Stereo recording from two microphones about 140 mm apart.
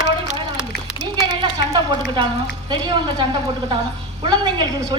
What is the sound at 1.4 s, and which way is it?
A woman's voice, 35° right (ahead or behind).